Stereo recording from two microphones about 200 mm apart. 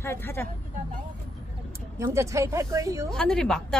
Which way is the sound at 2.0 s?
15° right (ahead or behind).